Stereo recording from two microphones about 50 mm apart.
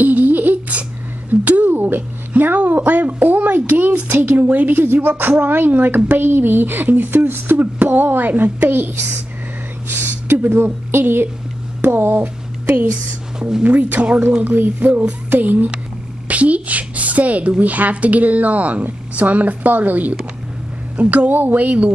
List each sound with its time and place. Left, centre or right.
0.0 s a sound: right
5.4 s a woman's voice: right
9.8 s a sound: right
11.8 s speech: right
12.9 s speech: centre
13.7 s a woman's voice: right